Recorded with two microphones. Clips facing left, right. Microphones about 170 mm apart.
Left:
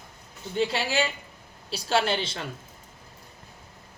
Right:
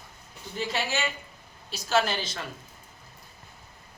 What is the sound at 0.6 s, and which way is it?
Speech, 30° left (ahead or behind).